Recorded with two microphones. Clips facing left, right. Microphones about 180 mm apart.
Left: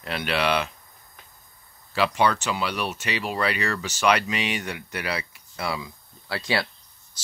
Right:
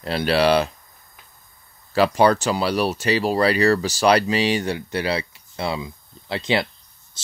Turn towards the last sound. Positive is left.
turn(degrees=-20)  # may be behind; listen again after turning